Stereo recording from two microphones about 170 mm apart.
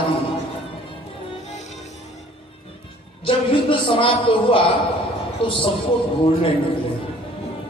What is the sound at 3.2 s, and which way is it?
Speech, 30° left (ahead or behind).